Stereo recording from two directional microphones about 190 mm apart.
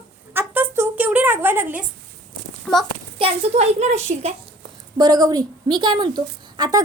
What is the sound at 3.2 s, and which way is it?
A child's voice, 30° right (ahead or behind).